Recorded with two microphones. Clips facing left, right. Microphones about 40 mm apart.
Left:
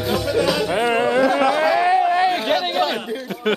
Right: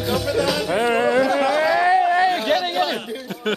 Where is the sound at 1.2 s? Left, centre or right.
Centre.